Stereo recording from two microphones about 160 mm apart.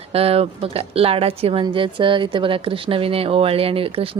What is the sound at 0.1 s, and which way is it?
Speech, 40° right (ahead or behind).